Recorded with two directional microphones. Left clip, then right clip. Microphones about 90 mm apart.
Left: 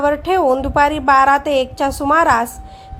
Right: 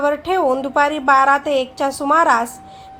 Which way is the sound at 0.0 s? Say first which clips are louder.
Left 2 dB; 35° left (ahead or behind).